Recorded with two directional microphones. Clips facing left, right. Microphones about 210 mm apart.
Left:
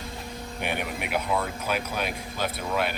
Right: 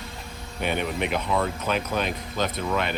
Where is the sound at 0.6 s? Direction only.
10° left (ahead or behind).